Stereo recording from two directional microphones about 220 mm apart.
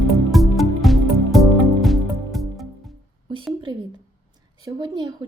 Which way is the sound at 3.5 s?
20° right (ahead or behind).